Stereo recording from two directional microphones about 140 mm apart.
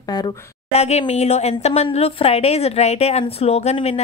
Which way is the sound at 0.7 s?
50° left (ahead or behind).